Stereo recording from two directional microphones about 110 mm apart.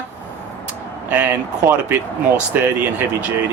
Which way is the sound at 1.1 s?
15° right (ahead or behind).